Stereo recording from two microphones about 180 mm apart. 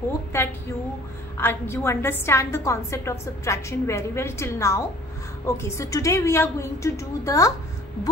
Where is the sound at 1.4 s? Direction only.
15° left (ahead or behind).